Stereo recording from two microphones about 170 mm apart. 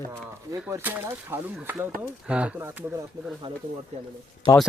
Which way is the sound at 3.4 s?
25° right (ahead or behind).